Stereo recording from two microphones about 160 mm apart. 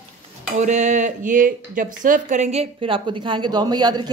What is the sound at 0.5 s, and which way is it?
Speech, 50° right (ahead or behind).